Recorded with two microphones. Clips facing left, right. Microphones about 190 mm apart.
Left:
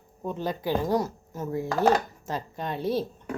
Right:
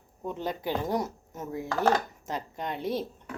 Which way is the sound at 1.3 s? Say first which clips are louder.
Left 5 dB; 30° left (ahead or behind).